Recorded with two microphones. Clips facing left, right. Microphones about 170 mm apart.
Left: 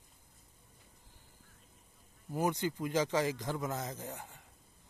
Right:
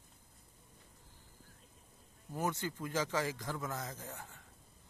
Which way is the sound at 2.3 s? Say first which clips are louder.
Left 4 dB; 15° left (ahead or behind).